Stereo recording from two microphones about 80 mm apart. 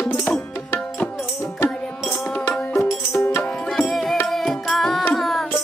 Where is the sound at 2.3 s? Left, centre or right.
Centre.